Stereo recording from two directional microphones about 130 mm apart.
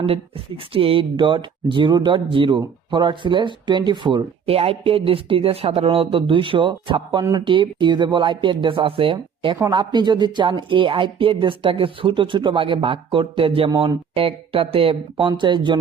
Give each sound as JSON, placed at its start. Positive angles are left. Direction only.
{"t": 0.0, "sound": "speech", "side_deg": -45}